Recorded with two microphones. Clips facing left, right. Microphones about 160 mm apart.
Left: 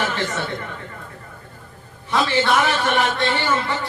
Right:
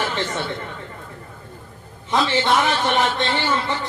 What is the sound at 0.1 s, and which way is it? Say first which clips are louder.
Speech: even; 20° right (ahead or behind).